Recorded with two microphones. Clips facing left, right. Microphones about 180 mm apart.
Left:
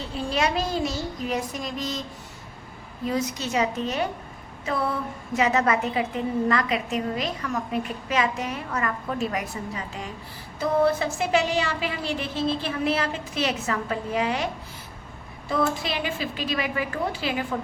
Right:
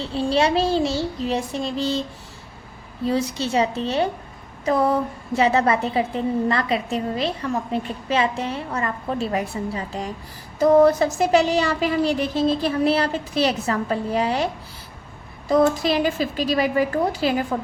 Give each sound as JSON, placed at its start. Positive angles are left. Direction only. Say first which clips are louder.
{"t": 0.0, "sound": "a woman's voice", "louder": "right 6 dB", "side_deg": -30}